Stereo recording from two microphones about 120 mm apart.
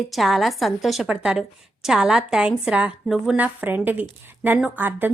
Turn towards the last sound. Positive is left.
turn(degrees=-15)  # may be behind; listen again after turning